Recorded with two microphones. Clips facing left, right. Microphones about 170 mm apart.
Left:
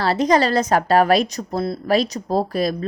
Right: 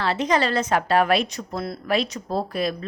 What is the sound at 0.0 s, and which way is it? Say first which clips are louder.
A woman's voice: left 5 dB; 40° left (ahead or behind).